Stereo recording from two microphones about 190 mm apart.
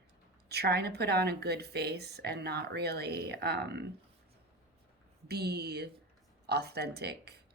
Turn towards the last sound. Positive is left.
turn(degrees=-60)  # may be behind; listen again after turning